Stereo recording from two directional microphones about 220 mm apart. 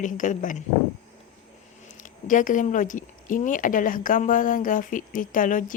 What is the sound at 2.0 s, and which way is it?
A woman's voice, 35° left (ahead or behind).